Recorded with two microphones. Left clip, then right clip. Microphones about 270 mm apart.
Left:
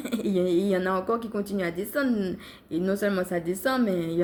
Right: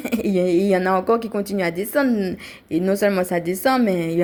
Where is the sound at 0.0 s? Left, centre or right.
Right.